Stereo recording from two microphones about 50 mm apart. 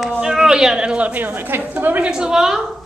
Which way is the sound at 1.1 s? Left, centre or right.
Right.